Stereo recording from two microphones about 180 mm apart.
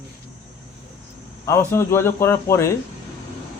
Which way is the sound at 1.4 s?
15° left (ahead or behind).